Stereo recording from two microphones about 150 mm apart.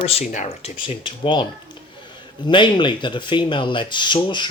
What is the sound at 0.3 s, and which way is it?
Speech, 50° left (ahead or behind).